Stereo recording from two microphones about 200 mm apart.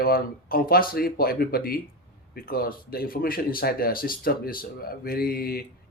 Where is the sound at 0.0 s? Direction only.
45° left (ahead or behind).